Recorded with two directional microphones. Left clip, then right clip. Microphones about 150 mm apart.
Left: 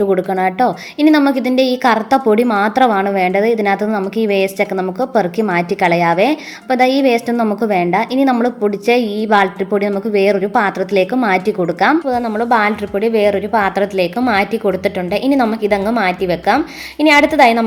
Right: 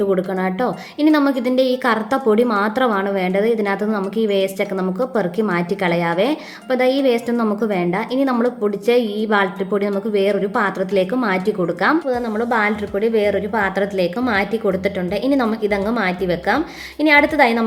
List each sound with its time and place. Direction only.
0.0 s a woman's voice: 20° left (ahead or behind)